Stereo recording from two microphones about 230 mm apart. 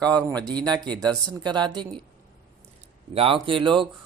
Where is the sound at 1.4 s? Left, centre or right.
Centre.